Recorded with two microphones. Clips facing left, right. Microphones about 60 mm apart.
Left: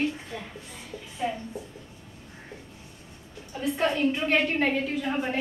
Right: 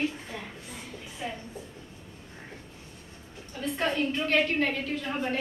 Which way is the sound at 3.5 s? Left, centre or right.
Centre.